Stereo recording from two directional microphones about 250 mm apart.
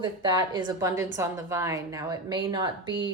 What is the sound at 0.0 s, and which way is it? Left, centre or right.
A woman's voice, centre.